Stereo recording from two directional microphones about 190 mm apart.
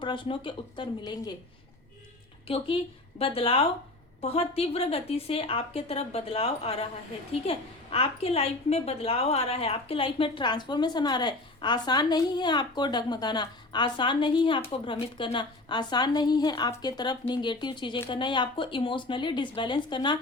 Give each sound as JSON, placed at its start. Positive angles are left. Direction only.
{"t": 0.0, "sound": "a woman's voice", "side_deg": 25}
{"t": 3.2, "sound": "a woman's voice", "side_deg": 30}